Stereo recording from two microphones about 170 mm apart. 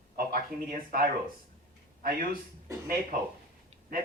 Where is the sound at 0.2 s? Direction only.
60° right (ahead or behind).